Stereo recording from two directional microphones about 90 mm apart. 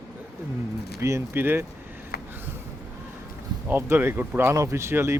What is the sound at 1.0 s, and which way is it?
Speech, 30° right (ahead or behind).